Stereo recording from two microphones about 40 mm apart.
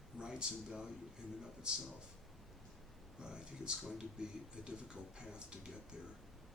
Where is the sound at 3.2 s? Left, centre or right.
Right.